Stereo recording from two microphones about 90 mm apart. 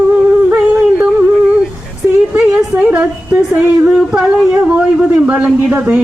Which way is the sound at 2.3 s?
15° right (ahead or behind).